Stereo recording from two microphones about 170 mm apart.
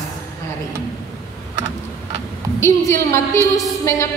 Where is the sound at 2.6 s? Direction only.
15° left (ahead or behind).